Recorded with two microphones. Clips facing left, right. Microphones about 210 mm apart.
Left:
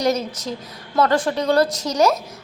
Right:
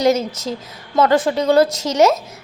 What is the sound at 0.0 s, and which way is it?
A woman's voice, 25° right (ahead or behind).